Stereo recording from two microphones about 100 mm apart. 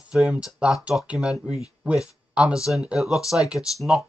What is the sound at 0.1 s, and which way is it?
Speech, 5° right (ahead or behind).